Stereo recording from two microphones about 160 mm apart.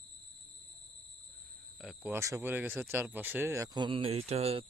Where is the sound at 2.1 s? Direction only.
15° right (ahead or behind).